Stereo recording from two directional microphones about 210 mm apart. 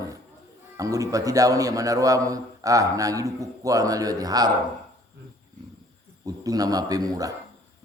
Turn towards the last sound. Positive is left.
turn(degrees=-15)  # may be behind; listen again after turning